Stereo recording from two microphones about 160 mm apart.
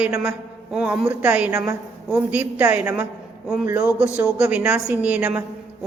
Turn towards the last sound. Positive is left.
turn(degrees=-10)  # may be behind; listen again after turning